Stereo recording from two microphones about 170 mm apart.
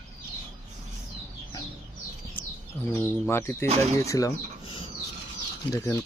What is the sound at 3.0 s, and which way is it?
Speech, 15° left (ahead or behind).